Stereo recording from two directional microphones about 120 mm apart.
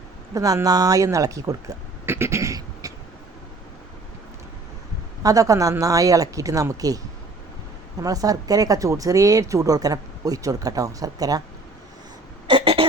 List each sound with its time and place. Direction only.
0.3 s speech: 30° right (ahead or behind)
5.2 s speech: 30° right (ahead or behind)
8.0 s speech: 30° right (ahead or behind)
12.5 s a sound: 50° right (ahead or behind)